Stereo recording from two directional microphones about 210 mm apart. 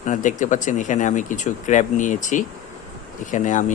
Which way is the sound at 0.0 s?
35° left (ahead or behind).